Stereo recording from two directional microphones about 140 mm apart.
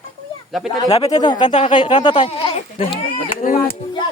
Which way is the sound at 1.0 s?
30° left (ahead or behind).